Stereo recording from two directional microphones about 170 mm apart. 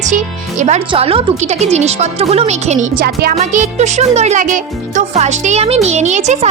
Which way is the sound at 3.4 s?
40° right (ahead or behind).